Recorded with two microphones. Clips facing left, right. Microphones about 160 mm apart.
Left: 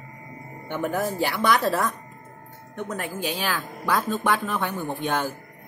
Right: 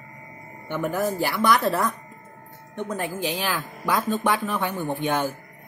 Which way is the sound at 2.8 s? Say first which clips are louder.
Right 2 dB; 15° right (ahead or behind).